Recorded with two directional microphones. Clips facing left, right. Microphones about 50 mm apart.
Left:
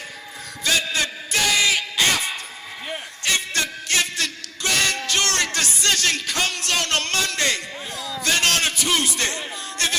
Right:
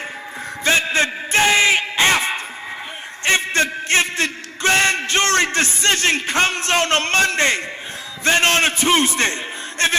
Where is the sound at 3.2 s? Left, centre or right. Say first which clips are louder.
Right 7 dB; right.